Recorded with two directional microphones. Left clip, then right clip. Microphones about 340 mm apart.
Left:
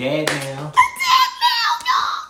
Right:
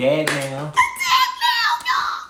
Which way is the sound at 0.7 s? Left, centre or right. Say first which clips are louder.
Left 3 dB; centre.